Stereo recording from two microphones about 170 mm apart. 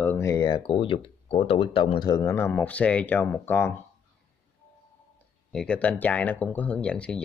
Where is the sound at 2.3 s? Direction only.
10° left (ahead or behind).